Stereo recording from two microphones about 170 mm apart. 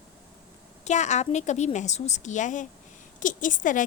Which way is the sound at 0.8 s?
45° left (ahead or behind).